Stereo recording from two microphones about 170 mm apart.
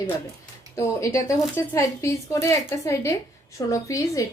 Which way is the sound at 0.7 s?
20° left (ahead or behind).